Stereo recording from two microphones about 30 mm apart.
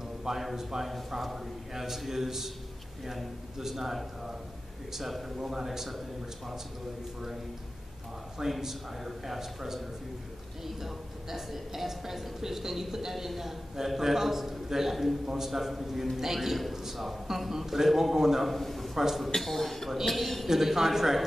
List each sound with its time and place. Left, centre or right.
0.3 s a man's voice: centre
0.8 s a woman's voice: centre
5.4 s a woman's voice: centre
5.9 s speech: centre
8.5 s a woman's voice: centre
18.4 s a man's voice: centre
18.9 s a woman's voice: centre
19.4 s speech: centre
20.4 s a woman's voice: centre